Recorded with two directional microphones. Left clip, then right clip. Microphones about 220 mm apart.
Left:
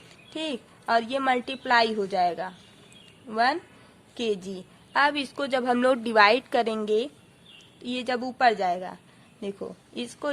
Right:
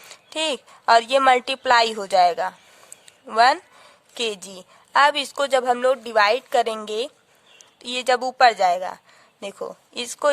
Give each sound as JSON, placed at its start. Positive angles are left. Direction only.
{"t": 0.1, "sound": "a woman's voice", "side_deg": -45}